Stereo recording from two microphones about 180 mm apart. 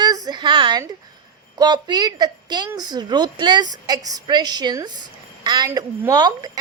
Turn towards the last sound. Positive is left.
turn(degrees=-20)  # may be behind; listen again after turning